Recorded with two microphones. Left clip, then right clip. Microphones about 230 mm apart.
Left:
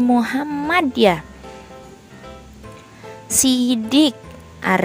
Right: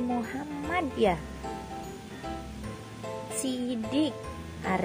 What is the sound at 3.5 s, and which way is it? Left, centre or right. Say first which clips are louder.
Speech: left 14 dB; left.